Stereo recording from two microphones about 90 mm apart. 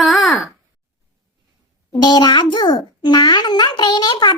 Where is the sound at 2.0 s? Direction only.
55° left (ahead or behind).